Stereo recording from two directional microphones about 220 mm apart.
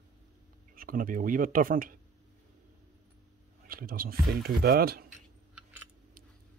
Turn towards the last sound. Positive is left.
turn(degrees=-45)  # may be behind; listen again after turning